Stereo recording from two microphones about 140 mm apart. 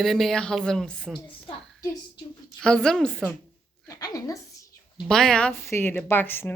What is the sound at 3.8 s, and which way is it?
Speech, 25° left (ahead or behind).